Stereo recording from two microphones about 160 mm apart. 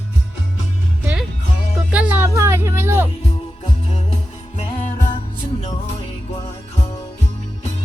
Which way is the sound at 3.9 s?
40° left (ahead or behind).